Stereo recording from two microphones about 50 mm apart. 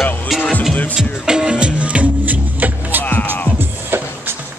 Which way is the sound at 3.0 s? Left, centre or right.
Left.